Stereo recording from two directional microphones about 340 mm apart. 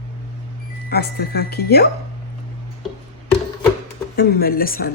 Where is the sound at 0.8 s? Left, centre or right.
Left.